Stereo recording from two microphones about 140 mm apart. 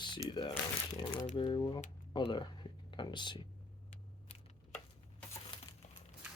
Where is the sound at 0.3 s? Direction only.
35° left (ahead or behind).